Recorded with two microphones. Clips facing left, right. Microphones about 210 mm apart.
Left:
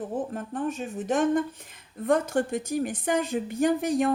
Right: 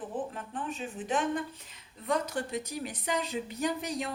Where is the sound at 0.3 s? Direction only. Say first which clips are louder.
Left 7 dB; 45° left (ahead or behind).